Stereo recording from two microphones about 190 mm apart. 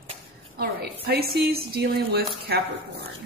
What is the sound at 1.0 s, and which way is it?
Speech, 55° right (ahead or behind).